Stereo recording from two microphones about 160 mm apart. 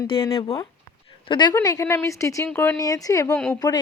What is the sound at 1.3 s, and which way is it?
Speech, 30° left (ahead or behind).